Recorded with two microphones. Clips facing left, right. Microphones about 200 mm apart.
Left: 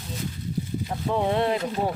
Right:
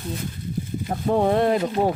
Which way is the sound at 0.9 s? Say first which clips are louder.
Right 5 dB; 50° right (ahead or behind).